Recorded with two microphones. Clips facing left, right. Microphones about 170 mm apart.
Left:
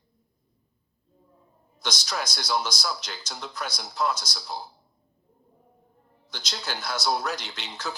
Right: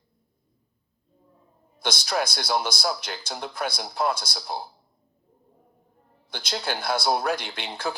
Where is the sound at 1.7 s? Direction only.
55° right (ahead or behind).